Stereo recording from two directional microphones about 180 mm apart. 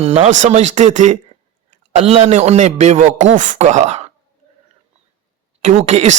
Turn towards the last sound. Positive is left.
turn(degrees=-40)  # may be behind; listen again after turning